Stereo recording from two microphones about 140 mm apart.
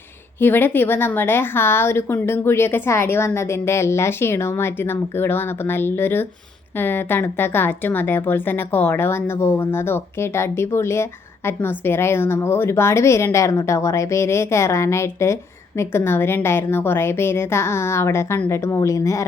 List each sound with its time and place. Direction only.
0.3 s a woman's voice: 15° left (ahead or behind)